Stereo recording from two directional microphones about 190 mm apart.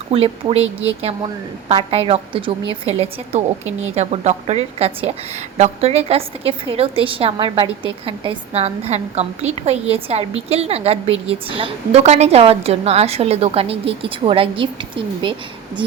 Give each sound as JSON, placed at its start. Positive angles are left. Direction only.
{"t": 0.1, "sound": "a woman's voice", "side_deg": -30}